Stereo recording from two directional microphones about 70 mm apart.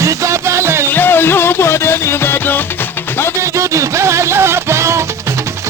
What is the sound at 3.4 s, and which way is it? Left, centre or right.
Music, right.